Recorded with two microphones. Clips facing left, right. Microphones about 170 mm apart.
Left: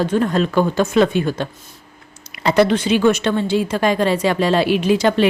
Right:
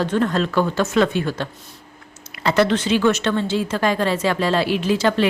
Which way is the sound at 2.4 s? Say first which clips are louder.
Left 3 dB; 15° left (ahead or behind).